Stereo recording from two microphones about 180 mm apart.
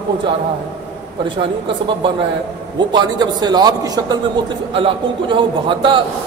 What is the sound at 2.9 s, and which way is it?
A man's voice, 25° right (ahead or behind).